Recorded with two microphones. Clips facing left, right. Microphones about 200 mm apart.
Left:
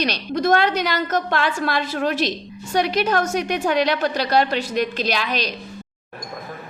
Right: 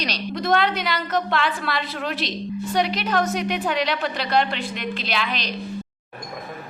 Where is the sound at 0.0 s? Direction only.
50° left (ahead or behind).